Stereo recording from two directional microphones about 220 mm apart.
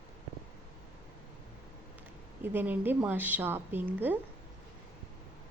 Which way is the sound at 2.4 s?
10° right (ahead or behind).